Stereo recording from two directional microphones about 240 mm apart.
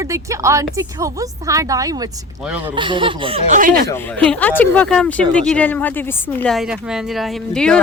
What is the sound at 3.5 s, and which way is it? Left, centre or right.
Speech, right.